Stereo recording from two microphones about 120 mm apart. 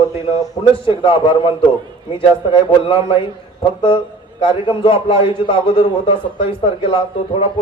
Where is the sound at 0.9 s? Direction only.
45° left (ahead or behind).